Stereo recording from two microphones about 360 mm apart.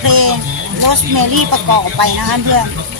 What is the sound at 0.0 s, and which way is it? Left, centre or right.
Music, right.